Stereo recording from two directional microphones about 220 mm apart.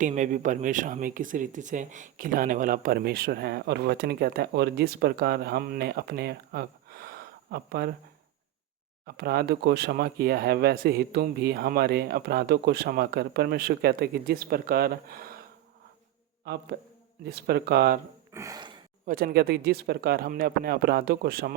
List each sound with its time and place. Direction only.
0.0 s speech: 35° right (ahead or behind)
9.0 s speech: 45° right (ahead or behind)
17.2 s speech: 45° right (ahead or behind)
18.3 s gasp: 15° right (ahead or behind)
19.0 s speech: 40° right (ahead or behind)